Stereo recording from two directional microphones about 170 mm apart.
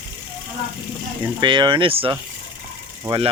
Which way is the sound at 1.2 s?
25° right (ahead or behind).